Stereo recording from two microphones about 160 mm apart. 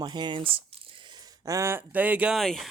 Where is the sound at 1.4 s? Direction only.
20° right (ahead or behind); by 2.7 s centre (ahead or behind).